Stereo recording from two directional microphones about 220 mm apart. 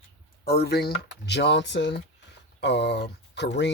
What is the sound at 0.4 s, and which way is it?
Mantra, 45° left (ahead or behind).